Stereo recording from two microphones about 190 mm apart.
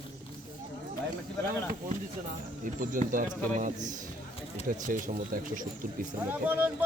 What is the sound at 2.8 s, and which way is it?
Speech, 45° right (ahead or behind).